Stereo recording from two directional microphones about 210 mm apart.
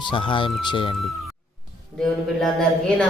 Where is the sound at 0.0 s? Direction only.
25° left (ahead or behind).